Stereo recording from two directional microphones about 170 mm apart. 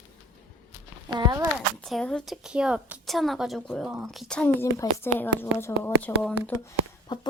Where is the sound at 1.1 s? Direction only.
25° right (ahead or behind).